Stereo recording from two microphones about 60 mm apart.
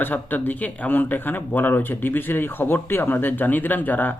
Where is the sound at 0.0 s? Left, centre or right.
Left.